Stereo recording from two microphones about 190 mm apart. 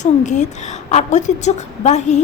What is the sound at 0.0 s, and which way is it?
A woman's voice, 40° left (ahead or behind).